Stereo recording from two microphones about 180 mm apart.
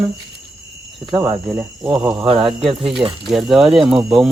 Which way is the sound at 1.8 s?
25° right (ahead or behind).